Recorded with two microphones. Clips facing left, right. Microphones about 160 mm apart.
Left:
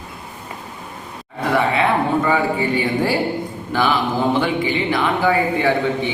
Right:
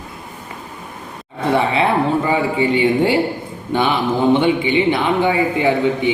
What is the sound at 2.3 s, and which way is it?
A man's voice, 25° right (ahead or behind).